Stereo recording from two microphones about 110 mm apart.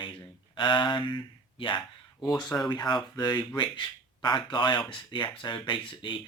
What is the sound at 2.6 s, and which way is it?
Speech, 40° left (ahead or behind).